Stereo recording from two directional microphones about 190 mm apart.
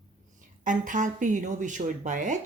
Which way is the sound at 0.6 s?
45° right (ahead or behind).